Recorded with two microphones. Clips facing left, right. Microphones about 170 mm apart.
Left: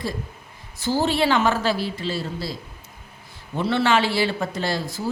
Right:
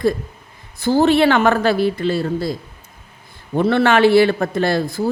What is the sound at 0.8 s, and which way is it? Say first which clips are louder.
Speech: right 8 dB; 55° right (ahead or behind).